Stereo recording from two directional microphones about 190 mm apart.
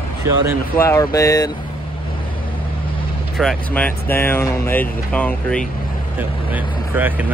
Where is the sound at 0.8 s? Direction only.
15° left (ahead or behind).